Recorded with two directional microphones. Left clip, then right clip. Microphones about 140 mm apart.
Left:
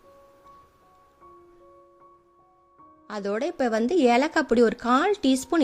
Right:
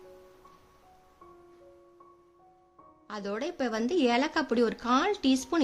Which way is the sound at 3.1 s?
45° left (ahead or behind).